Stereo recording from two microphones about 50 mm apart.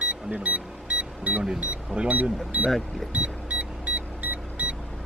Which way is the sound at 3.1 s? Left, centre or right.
Right.